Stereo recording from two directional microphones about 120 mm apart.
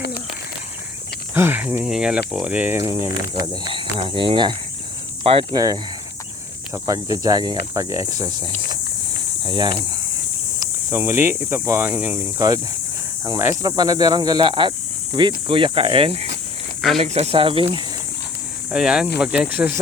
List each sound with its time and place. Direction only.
1.3 s speech: 15° right (ahead or behind)
2.8 s cricket: 25° right (ahead or behind)
3.4 s speech: 45° right (ahead or behind)
5.5 s cricket: 30° right (ahead or behind)
6.8 s cricket: 30° right (ahead or behind)
9.4 s speech: 40° right (ahead or behind)
10.6 s speech: 20° right (ahead or behind)
13.4 s speech: 30° right (ahead or behind); by 17.8 s 45° right (ahead or behind)
18.7 s speech: 5° right (ahead or behind)